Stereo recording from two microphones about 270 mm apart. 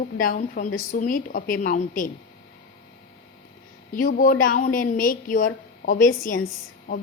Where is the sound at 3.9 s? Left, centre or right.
Left.